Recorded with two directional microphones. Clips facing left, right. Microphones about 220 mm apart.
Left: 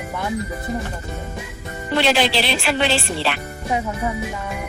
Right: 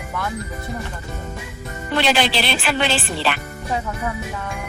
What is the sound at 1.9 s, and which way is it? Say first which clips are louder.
Speech: left 1 dB; centre (ahead or behind).